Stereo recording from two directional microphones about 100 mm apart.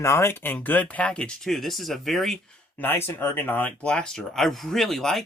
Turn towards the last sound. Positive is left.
turn(degrees=5)  # may be behind; listen again after turning